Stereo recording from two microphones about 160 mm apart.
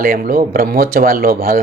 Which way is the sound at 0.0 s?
65° right (ahead or behind).